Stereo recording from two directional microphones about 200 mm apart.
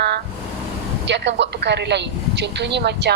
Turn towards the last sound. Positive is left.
turn(degrees=-60)  # may be behind; listen again after turning